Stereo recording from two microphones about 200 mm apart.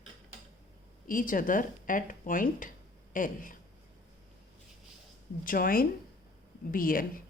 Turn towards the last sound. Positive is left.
turn(degrees=45)  # may be behind; listen again after turning